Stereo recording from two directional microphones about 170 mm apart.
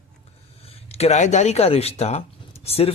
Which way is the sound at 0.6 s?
35° left (ahead or behind).